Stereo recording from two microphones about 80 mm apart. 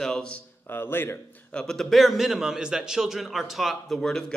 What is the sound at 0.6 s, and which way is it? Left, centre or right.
Speech, left.